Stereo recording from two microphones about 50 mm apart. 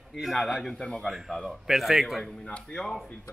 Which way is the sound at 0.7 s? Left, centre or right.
Left.